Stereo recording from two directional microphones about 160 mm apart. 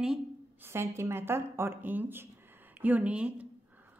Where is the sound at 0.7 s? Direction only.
15° right (ahead or behind).